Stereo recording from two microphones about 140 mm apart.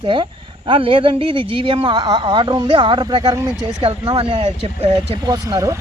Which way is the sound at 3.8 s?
40° right (ahead or behind).